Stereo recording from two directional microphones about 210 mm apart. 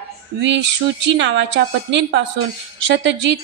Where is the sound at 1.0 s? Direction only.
60° right (ahead or behind).